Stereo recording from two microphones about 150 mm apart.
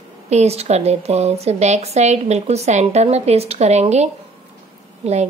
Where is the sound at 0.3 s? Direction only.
45° right (ahead or behind).